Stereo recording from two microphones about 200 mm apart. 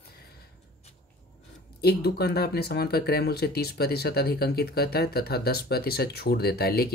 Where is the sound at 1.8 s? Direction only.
55° left (ahead or behind).